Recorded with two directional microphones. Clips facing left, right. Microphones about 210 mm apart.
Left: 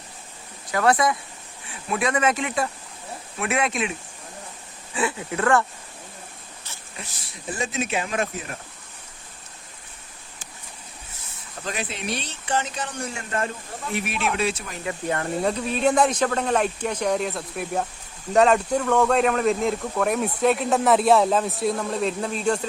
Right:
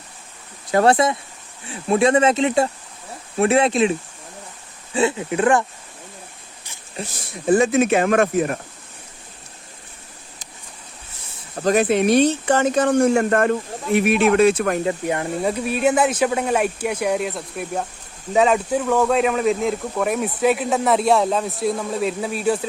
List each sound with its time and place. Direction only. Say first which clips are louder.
0.7 s speech: right 5 dB; 30° right (ahead or behind)
4.9 s speech: right 6 dB; 25° right (ahead or behind)
7.4 s speech: right 13 dB; 55° right (ahead or behind)
11.5 s speech: right 15 dB; 45° right (ahead or behind)
15.0 s speech: right 2 dB; 15° right (ahead or behind)